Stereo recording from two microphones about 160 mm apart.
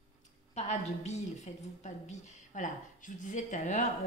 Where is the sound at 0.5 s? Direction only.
45° left (ahead or behind).